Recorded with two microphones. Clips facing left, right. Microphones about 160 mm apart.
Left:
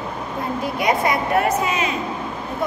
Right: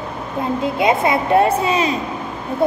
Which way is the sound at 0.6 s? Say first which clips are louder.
Right 3 dB; 25° right (ahead or behind).